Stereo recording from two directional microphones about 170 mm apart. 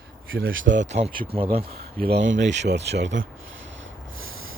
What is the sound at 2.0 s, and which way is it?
Speech, 70° right (ahead or behind).